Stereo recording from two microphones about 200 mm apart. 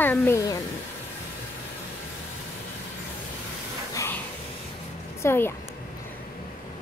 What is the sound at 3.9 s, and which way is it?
Music, 15° left (ahead or behind).